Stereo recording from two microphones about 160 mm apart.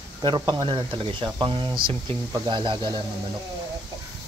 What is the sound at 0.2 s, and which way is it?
Speech, 30° right (ahead or behind).